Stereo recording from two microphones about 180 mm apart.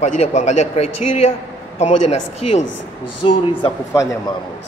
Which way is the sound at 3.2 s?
30° left (ahead or behind).